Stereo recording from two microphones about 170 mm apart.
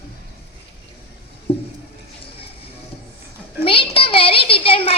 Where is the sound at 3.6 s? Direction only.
30° left (ahead or behind).